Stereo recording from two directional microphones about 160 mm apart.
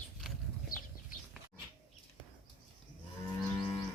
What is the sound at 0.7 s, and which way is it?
Bird flight, 60° left (ahead or behind).